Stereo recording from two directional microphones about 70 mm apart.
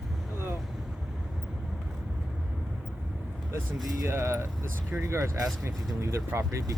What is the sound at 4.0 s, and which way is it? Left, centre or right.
Speech, right.